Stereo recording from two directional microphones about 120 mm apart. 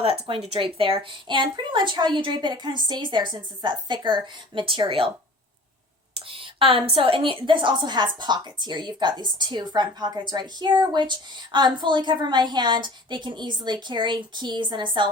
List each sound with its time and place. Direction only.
0.0 s a woman's voice: 50° right (ahead or behind)
6.1 s a woman's voice: 50° right (ahead or behind)